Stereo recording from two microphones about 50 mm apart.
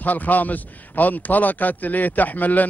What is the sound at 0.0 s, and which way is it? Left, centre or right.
A man's voice, left.